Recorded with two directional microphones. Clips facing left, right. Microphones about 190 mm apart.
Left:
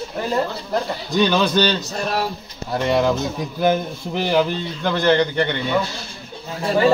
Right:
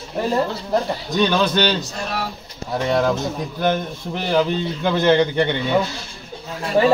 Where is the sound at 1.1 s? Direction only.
5° left (ahead or behind).